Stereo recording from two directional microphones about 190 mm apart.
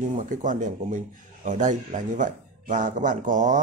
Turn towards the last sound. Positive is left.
turn(degrees=-40)  # may be behind; listen again after turning